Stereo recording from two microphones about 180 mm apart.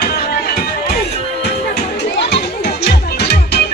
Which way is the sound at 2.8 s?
65° left (ahead or behind).